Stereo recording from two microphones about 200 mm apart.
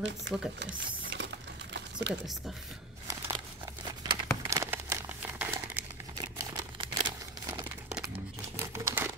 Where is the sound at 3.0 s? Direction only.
15° right (ahead or behind).